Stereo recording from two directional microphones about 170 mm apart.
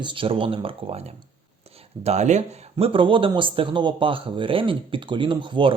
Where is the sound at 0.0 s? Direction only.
30° right (ahead or behind).